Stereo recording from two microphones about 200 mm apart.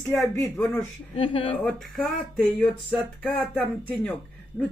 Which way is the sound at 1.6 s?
Centre (ahead or behind).